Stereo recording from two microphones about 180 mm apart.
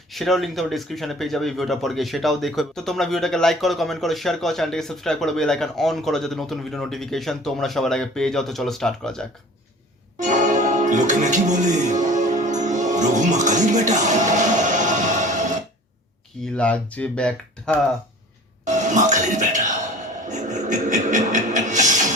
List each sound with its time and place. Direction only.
0.1 s speech: centre (ahead or behind)
10.2 s music: 45° right (ahead or behind)
16.6 s speech: 5° left (ahead or behind)
18.6 s speech: 40° right (ahead or behind)
20.2 s music: 40° right (ahead or behind)